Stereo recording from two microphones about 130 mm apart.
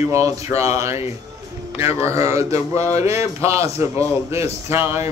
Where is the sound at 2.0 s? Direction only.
20° right (ahead or behind).